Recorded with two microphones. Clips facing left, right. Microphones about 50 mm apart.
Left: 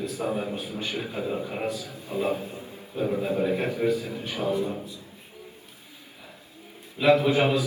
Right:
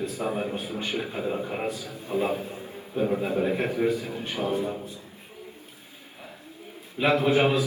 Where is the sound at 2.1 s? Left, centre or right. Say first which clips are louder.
Right 1 dB; right.